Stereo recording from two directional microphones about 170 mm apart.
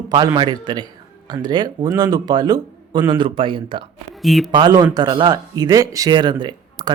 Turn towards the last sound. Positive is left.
turn(degrees=-25)  # may be behind; listen again after turning